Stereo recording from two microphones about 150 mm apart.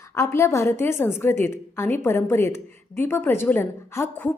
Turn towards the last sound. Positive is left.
turn(degrees=15)  # may be behind; listen again after turning